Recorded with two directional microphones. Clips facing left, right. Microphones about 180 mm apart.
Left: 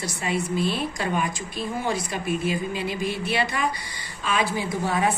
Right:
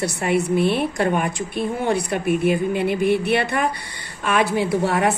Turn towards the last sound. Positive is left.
turn(degrees=-70)  # may be behind; listen again after turning